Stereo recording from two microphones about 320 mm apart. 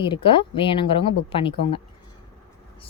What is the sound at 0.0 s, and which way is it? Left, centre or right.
Speech, centre.